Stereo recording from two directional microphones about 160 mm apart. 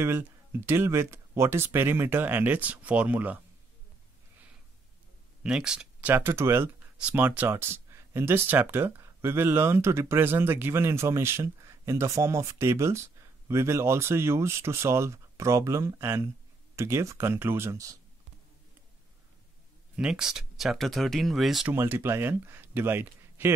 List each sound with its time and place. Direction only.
0.0 s speech: 15° right (ahead or behind)
5.4 s speech: 5° right (ahead or behind)
20.0 s speech: 5° right (ahead or behind)
21.7 s speech: 15° right (ahead or behind)